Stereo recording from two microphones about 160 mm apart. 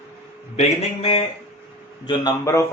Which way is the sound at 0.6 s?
35° left (ahead or behind).